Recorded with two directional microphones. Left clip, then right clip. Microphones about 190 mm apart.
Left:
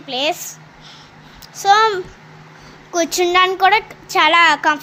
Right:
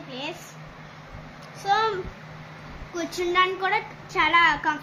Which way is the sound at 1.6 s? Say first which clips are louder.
Left 10 dB; 45° left (ahead or behind).